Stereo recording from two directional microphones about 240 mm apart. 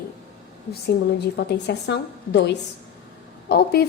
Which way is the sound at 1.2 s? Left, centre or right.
Left.